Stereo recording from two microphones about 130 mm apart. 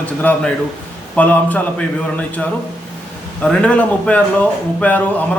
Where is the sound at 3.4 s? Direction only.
10° left (ahead or behind).